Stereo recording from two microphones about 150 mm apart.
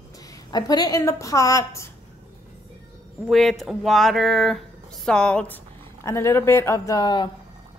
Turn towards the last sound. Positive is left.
turn(degrees=25)  # may be behind; listen again after turning